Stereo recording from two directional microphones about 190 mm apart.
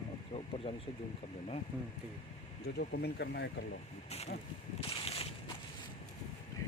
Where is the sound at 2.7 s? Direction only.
55° left (ahead or behind).